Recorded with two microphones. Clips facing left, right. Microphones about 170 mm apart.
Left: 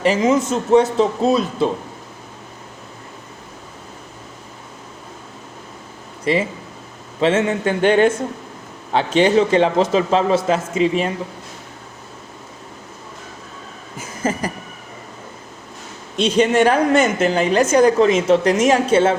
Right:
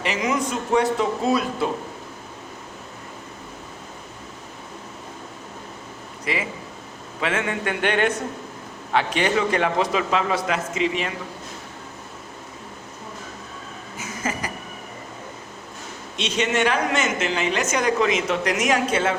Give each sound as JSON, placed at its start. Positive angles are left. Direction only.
{"t": 0.0, "sound": "speech", "side_deg": 30}
{"t": 6.3, "sound": "a woman's voice", "side_deg": 30}
{"t": 16.1, "sound": "a woman's voice", "side_deg": 35}